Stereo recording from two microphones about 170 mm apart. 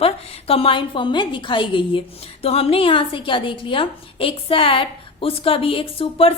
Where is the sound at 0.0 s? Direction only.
35° left (ahead or behind).